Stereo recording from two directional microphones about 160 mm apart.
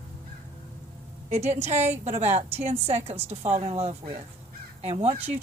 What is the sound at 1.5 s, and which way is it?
A woman's voice, 45° right (ahead or behind).